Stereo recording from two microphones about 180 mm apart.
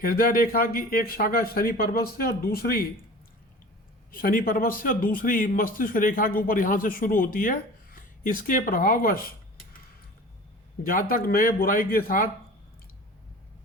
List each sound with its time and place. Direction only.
0.0 s speech: 55° left (ahead or behind)
4.1 s a man's voice: 50° left (ahead or behind)
10.8 s a man's voice: 50° left (ahead or behind)